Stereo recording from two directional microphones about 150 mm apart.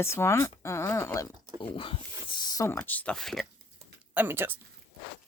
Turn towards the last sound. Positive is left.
turn(degrees=-15)  # may be behind; listen again after turning